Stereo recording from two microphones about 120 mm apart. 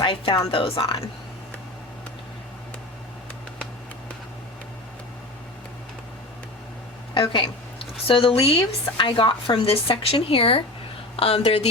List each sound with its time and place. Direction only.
0.0 s a woman's voice: 45° left (ahead or behind)
7.1 s speech: 45° left (ahead or behind)